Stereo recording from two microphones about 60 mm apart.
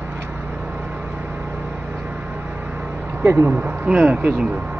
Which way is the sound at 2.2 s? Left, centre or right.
Right.